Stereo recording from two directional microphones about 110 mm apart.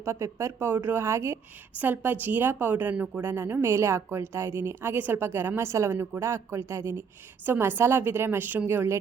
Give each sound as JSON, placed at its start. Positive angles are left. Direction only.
{"t": 0.0, "sound": "a woman's voice", "side_deg": -25}